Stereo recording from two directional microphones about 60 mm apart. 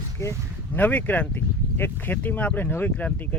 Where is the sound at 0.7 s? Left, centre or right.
Left.